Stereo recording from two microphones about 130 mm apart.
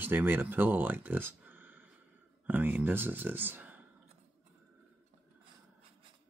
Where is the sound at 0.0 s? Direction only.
15° right (ahead or behind).